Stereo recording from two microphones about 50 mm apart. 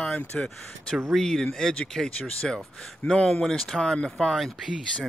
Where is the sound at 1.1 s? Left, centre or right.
Centre.